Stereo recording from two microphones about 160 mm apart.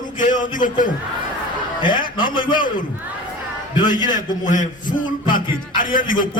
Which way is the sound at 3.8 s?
55° left (ahead or behind).